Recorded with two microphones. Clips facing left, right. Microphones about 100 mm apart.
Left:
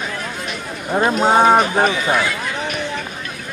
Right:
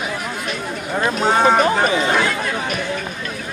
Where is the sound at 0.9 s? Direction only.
20° left (ahead or behind).